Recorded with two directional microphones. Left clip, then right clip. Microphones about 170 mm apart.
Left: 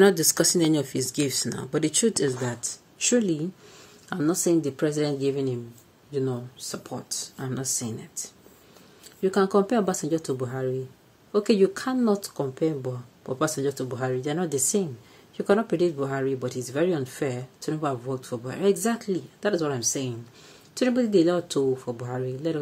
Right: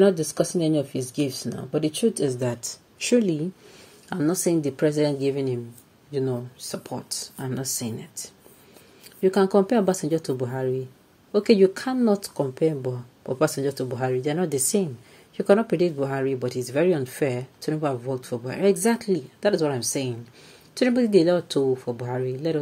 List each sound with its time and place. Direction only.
0.0 s speech: 5° left (ahead or behind)
2.2 s speech: 10° right (ahead or behind)